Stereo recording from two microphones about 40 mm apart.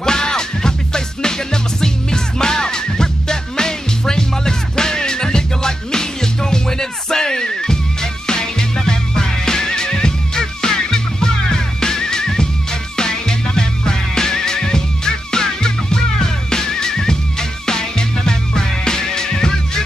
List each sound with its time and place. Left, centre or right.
0.0 s music: centre